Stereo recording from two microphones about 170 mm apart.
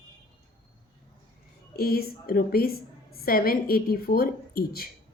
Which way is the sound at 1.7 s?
60° left (ahead or behind).